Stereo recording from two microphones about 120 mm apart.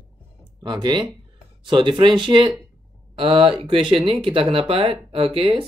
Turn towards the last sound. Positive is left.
turn(degrees=-50)  # may be behind; listen again after turning